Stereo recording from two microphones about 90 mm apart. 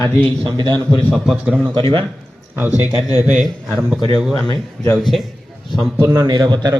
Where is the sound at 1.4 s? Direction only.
15° right (ahead or behind).